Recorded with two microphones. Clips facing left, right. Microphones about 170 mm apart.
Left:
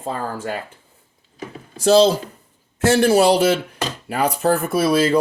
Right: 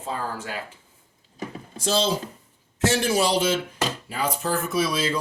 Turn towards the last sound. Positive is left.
turn(degrees=55)  # may be behind; listen again after turning